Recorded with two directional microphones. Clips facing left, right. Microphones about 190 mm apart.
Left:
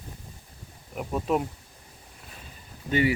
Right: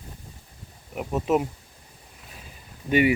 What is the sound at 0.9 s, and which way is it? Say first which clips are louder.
Speech: right 3 dB; 5° right (ahead or behind).